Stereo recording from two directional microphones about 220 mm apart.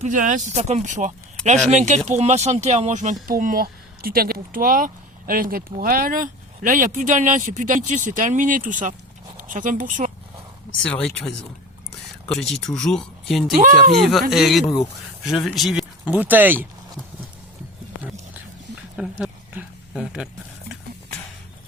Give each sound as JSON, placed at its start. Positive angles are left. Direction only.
{"t": 0.0, "sound": "speech", "side_deg": -35}
{"t": 10.8, "sound": "speech", "side_deg": 5}
{"t": 12.3, "sound": "speech", "side_deg": 0}
{"t": 13.6, "sound": "speech", "side_deg": -35}
{"t": 14.0, "sound": "speech", "side_deg": 0}
{"t": 18.9, "sound": "speech", "side_deg": -5}